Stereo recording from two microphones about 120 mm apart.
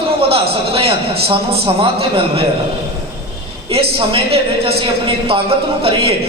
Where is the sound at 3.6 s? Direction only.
50° right (ahead or behind).